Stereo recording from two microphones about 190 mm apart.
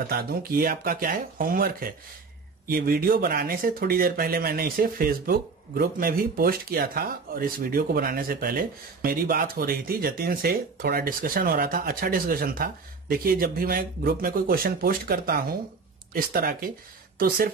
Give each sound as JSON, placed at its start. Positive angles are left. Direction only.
{"t": 0.1, "sound": "speech", "side_deg": -50}